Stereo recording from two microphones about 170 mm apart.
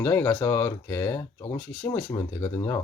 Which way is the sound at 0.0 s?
10° left (ahead or behind).